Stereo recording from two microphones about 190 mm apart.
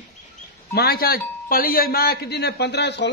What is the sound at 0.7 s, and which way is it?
Speech, 55° left (ahead or behind).